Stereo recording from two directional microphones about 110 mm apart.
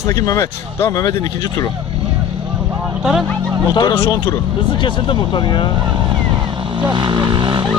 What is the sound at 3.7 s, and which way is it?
Speech, 40° left (ahead or behind).